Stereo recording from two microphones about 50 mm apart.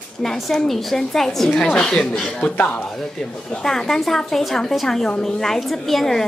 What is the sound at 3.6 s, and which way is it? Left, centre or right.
A woman's voice, centre.